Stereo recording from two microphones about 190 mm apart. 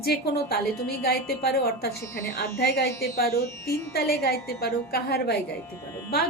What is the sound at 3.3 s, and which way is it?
Speech, 15° left (ahead or behind).